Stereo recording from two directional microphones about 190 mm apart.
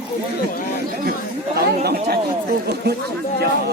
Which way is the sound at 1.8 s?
55° right (ahead or behind).